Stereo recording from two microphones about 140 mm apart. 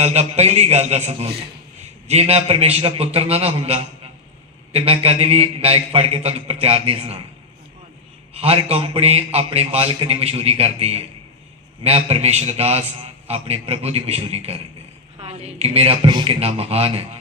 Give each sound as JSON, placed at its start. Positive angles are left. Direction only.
{"t": 0.0, "sound": "a man's voice", "side_deg": -50}
{"t": 8.4, "sound": "a man's voice", "side_deg": -45}